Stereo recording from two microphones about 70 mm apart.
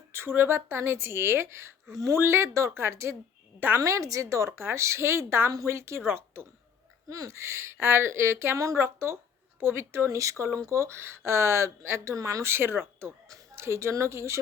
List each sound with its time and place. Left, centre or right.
0.1 s speech: right
2.1 s a woman's voice: right
7.1 s a woman's voice: right